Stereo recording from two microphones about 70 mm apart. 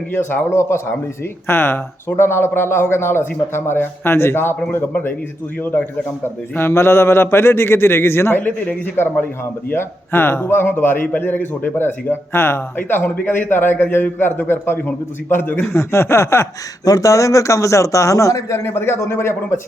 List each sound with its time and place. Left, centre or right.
0.1 s a man's voice: left
6.6 s a man's voice: left
15.6 s speech: left
16.8 s a man's voice: left
18.7 s speech: left